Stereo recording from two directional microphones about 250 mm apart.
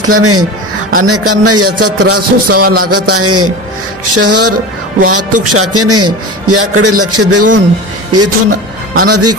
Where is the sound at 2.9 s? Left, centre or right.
Right.